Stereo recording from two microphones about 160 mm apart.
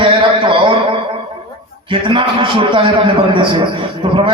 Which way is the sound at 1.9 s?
30° right (ahead or behind).